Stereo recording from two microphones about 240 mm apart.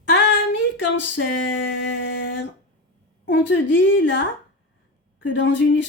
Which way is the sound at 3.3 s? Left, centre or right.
Left.